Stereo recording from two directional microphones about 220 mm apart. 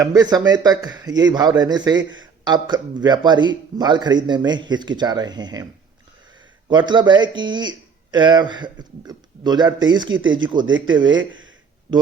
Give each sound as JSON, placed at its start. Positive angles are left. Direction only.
{"t": 0.0, "sound": "a man's voice", "side_deg": -15}
{"t": 6.7, "sound": "a man's voice", "side_deg": -20}